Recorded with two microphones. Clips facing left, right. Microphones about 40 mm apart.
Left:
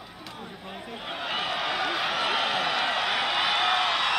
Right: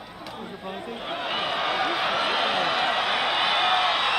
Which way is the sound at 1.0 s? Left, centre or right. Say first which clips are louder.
Right 2 dB; centre.